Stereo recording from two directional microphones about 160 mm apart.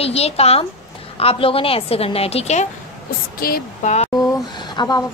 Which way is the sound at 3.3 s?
70° left (ahead or behind).